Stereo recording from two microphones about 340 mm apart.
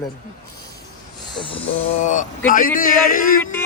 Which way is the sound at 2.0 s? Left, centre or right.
Left.